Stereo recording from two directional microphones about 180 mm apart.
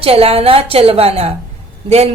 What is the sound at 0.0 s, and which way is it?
A woman's voice, 35° right (ahead or behind).